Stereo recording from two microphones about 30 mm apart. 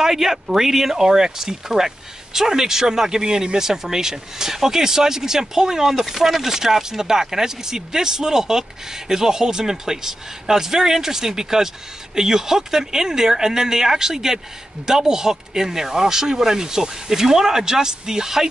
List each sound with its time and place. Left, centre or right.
0.0 s speech: centre